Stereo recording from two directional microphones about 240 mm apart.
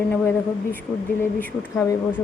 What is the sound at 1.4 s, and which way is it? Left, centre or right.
Speech, centre.